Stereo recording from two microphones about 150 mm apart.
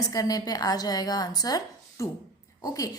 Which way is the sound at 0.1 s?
25° left (ahead or behind).